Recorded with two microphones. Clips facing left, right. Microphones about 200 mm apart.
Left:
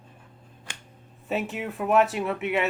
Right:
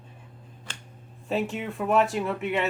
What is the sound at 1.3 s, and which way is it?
Speech, centre (ahead or behind).